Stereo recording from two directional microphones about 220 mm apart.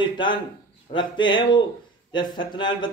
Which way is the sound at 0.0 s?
20° left (ahead or behind).